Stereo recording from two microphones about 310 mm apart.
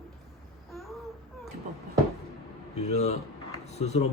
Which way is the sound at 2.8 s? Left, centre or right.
Left.